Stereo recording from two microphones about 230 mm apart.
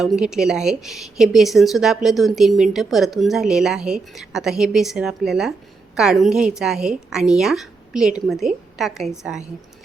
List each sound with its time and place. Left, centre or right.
0.0 s a woman's voice: centre